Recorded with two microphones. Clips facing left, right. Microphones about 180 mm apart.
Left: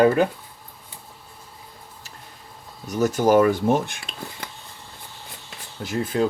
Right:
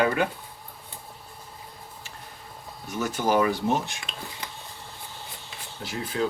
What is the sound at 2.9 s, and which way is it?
Speech, 40° left (ahead or behind).